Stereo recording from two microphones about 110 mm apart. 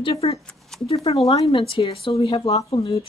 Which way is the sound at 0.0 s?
60° left (ahead or behind).